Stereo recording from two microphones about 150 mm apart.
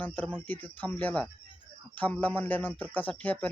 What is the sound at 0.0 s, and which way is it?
A man's voice, 10° left (ahead or behind).